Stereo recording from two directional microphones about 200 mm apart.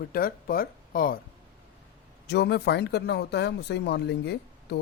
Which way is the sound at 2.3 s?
55° left (ahead or behind).